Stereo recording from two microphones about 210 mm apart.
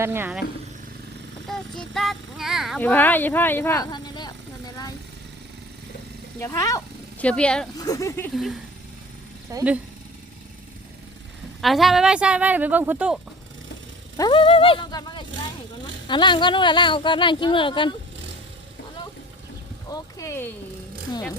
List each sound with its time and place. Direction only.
0.0 s speech: 10° right (ahead or behind)
1.5 s speech: centre (ahead or behind); by 4.9 s 20° left (ahead or behind)
6.4 s speech: 15° left (ahead or behind)
7.8 s speech: 15° left (ahead or behind)
9.5 s speech: 15° right (ahead or behind)
11.6 s speech: centre (ahead or behind)
14.2 s speech: 25° left (ahead or behind)
19.9 s vehicle: 15° left (ahead or behind)
21.1 s speech: 20° left (ahead or behind)